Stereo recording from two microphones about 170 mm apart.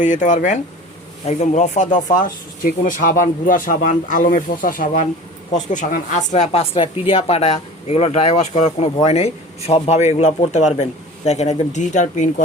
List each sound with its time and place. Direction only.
0.0 s speech: 45° left (ahead or behind)